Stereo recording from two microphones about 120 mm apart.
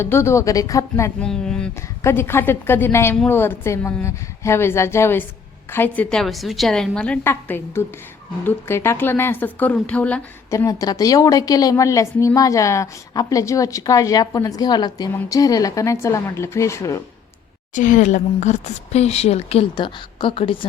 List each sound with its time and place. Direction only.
0.0 s a woman's voice: 20° left (ahead or behind)
1.2 s speech: 5° left (ahead or behind)
2.0 s a woman's voice: 20° left (ahead or behind)
6.1 s a woman's voice: centre (ahead or behind)
10.5 s a woman's voice: 25° left (ahead or behind)
17.7 s speech: 90° left; by 19.6 s 60° left (ahead or behind)
19.7 s a woman's voice: 45° left (ahead or behind)